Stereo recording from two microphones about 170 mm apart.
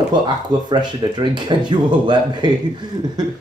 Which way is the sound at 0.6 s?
25° right (ahead or behind).